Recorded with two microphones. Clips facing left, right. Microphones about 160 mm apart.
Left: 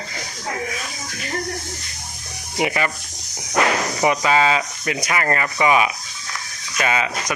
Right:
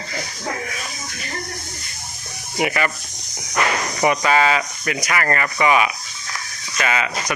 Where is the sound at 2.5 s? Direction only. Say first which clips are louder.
Even; 20° left (ahead or behind).